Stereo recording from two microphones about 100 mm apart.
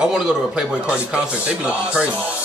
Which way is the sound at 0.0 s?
5° right (ahead or behind).